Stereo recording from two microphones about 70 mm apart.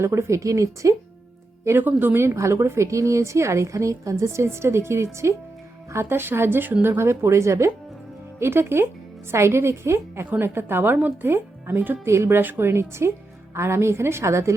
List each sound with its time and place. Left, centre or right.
0.0 s speech: right
1.6 s a woman's voice: right
8.4 s a woman's voice: right
12.0 s a woman's voice: right